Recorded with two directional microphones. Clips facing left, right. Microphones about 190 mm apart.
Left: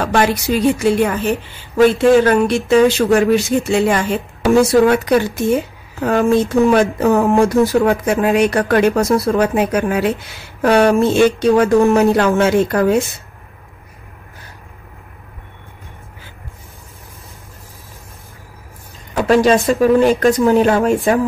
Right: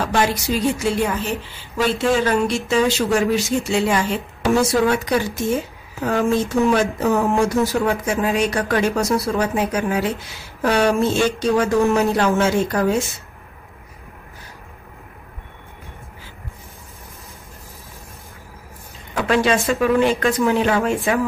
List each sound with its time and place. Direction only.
0.0 s speech: 60° left (ahead or behind)
6.7 s speech: 60° left (ahead or behind)
19.1 s speech: 40° left (ahead or behind)